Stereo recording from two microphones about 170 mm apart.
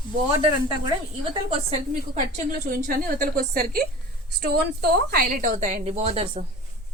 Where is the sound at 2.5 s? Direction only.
60° right (ahead or behind).